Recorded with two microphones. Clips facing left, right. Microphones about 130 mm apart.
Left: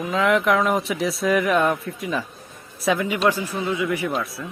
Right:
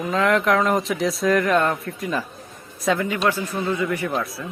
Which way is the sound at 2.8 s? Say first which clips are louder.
Left 1 dB; 10° left (ahead or behind).